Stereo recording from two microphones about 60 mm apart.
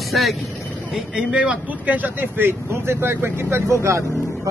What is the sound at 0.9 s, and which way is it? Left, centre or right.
Speech, centre.